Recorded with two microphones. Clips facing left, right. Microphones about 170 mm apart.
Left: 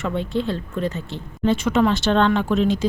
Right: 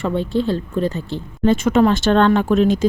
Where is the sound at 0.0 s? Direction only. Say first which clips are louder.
Right 4 dB; 35° right (ahead or behind).